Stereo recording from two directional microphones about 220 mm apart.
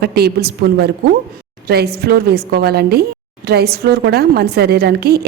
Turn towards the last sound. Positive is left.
turn(degrees=-45)  # may be behind; listen again after turning